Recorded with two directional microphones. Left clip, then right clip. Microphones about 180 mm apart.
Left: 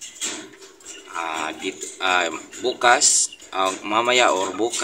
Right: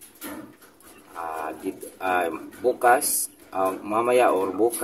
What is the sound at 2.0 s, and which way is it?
Speech, 10° right (ahead or behind).